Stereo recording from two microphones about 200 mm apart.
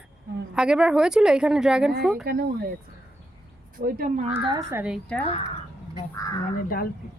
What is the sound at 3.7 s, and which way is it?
Speech, 45° right (ahead or behind).